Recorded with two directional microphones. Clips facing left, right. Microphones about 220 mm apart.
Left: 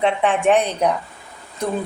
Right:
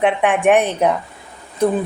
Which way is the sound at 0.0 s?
15° right (ahead or behind).